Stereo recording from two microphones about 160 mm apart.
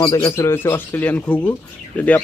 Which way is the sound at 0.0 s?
35° left (ahead or behind).